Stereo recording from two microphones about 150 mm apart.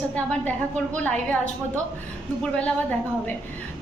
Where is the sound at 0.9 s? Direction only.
10° left (ahead or behind).